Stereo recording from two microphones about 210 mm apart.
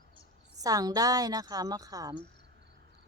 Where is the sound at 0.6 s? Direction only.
15° right (ahead or behind).